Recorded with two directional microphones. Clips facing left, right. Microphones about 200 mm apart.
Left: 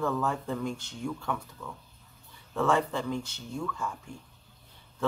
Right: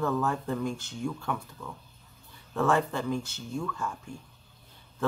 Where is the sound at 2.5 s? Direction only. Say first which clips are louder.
Right 1 dB; 5° right (ahead or behind).